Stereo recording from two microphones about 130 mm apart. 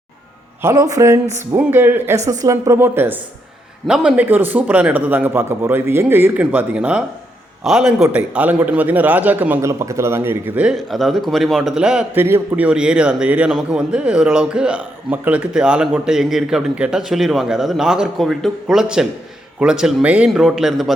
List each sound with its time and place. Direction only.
0.6 s a man's voice: 25° right (ahead or behind)
10.8 s a man's voice: centre (ahead or behind)